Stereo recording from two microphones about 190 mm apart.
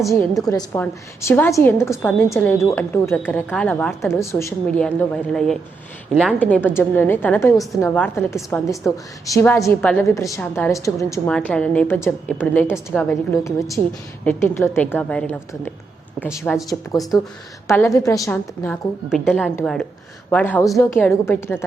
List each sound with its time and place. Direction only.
0.0 s a woman's voice: 15° left (ahead or behind)
8.4 s a woman's voice: centre (ahead or behind)
9.2 s a woman's voice: 15° left (ahead or behind)
11.3 s a woman's voice: 5° left (ahead or behind)
16.5 s a woman's voice: centre (ahead or behind)
17.7 s a woman's voice: 15° left (ahead or behind)